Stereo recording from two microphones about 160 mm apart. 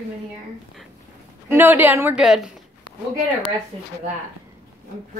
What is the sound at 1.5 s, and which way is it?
Speech, 10° right (ahead or behind).